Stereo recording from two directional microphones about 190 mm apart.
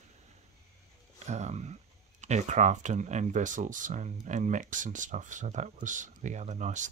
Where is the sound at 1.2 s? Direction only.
35° right (ahead or behind).